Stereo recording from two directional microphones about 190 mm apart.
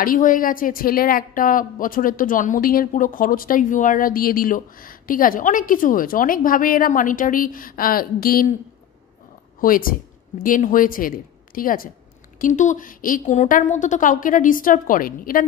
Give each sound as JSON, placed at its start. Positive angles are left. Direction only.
{"t": 0.0, "sound": "speech", "side_deg": 45}
{"t": 9.6, "sound": "a woman's voice", "side_deg": 50}